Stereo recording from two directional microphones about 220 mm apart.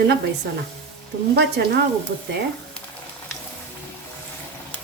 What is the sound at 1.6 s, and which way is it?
Speech, 50° right (ahead or behind).